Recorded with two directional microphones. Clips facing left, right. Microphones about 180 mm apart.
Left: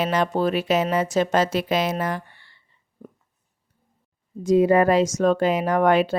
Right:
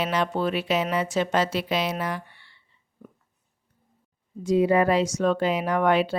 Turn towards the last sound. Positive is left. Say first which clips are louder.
# left 3 dB
turn(degrees=45)  # may be behind; listen again after turning